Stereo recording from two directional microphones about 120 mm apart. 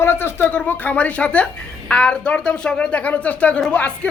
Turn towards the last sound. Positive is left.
turn(degrees=10)  # may be behind; listen again after turning